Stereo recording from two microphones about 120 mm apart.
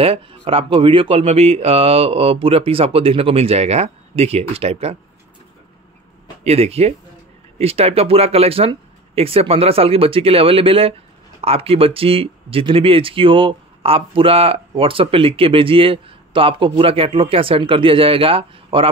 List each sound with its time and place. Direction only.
0.0 s speech: 50° right (ahead or behind)
6.4 s speech: 55° right (ahead or behind)